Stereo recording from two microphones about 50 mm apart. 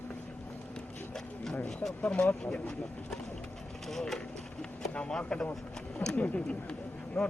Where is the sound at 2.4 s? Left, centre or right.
Left.